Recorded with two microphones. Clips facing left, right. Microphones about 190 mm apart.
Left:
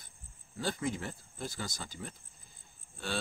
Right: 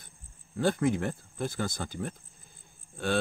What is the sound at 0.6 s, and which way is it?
Speech, 55° right (ahead or behind).